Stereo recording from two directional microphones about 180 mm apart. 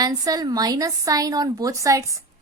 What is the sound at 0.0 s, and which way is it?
A woman's voice, 20° right (ahead or behind).